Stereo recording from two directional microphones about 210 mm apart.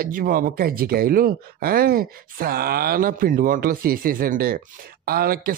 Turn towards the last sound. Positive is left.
turn(degrees=-45)  # may be behind; listen again after turning